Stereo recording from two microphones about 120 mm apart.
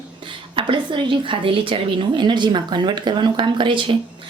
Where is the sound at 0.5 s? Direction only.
45° right (ahead or behind).